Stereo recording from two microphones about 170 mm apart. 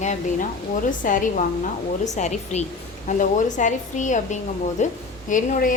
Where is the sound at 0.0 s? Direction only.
45° left (ahead or behind).